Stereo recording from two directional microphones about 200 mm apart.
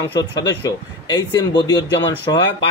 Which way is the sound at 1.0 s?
20° left (ahead or behind).